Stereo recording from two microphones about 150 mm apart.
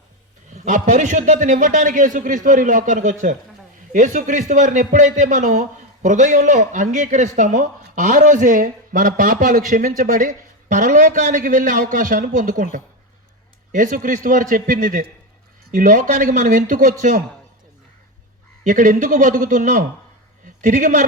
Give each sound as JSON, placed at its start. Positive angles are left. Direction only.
{"t": 0.5, "sound": "a man's voice", "side_deg": -55}
{"t": 13.7, "sound": "a man's voice", "side_deg": -60}
{"t": 18.6, "sound": "a man's voice", "side_deg": -60}